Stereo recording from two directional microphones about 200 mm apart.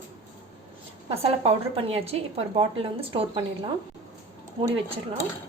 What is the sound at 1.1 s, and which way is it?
A woman's voice, 30° right (ahead or behind).